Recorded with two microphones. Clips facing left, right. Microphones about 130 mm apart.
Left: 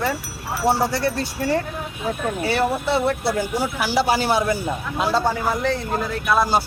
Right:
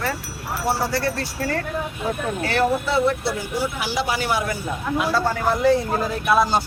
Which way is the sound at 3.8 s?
35° left (ahead or behind).